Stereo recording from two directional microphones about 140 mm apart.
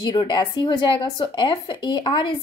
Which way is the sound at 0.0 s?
35° left (ahead or behind).